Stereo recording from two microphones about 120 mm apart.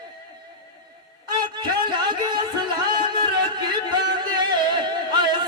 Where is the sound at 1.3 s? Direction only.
40° right (ahead or behind).